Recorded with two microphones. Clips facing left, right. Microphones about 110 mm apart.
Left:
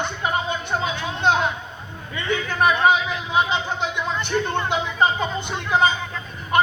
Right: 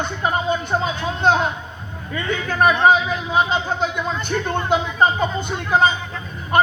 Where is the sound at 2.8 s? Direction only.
40° right (ahead or behind).